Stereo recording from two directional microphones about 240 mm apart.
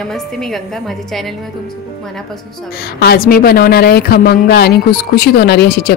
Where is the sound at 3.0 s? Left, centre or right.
Left.